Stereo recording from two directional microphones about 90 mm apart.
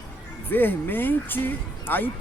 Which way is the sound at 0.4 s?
20° left (ahead or behind).